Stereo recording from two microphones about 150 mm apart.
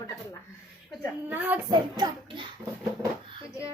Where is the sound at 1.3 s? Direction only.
10° right (ahead or behind).